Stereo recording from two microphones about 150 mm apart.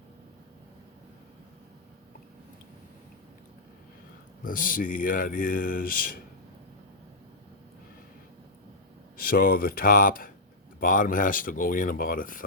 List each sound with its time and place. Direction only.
4.4 s speech: 65° left (ahead or behind)
9.1 s speech: 75° left (ahead or behind)